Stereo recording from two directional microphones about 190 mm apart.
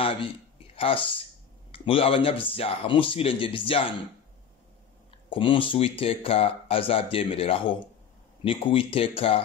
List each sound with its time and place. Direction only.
0.7 s speech: 30° left (ahead or behind)
5.3 s speech: 25° left (ahead or behind)